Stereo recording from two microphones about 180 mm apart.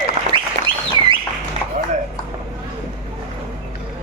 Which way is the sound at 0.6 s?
40° right (ahead or behind).